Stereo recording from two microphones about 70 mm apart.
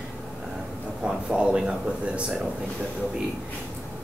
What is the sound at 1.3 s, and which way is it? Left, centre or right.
Speech, centre.